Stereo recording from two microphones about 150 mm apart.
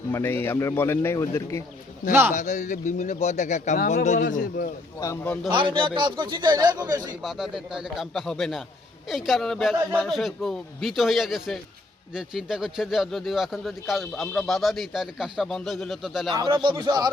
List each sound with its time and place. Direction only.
0.1 s a man's voice: 15° left (ahead or behind)
2.3 s a man's voice: 55° left (ahead or behind)
5.2 s a man's voice: 10° left (ahead or behind)
5.5 s speech: 35° right (ahead or behind)
7.2 s speech: 5° right (ahead or behind)
16.3 s speech: 30° right (ahead or behind)